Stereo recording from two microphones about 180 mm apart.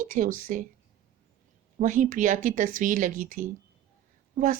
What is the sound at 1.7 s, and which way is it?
Speech, 45° right (ahead or behind).